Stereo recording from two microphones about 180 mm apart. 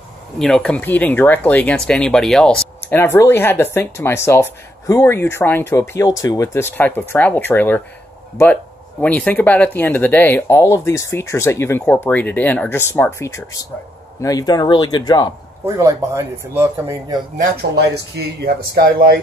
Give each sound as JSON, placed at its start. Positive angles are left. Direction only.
{"t": 0.4, "sound": "speech", "side_deg": 5}
{"t": 9.0, "sound": "speech", "side_deg": 10}
{"t": 15.6, "sound": "speech", "side_deg": -15}
{"t": 17.4, "sound": "speech", "side_deg": -65}